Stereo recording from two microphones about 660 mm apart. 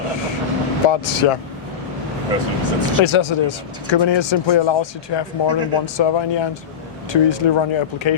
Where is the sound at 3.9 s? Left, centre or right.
Left.